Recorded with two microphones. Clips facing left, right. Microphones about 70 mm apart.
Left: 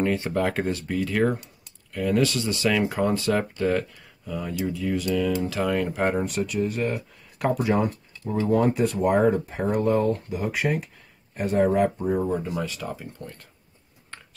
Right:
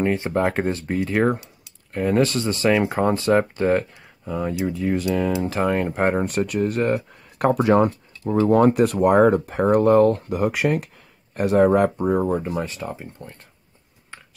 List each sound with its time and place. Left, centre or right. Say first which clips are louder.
0.0 s speech: right 3 dB; right
12.3 s speech: right 3 dB; right